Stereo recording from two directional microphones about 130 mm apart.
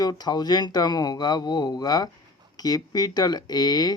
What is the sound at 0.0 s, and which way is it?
Speech, 30° left (ahead or behind).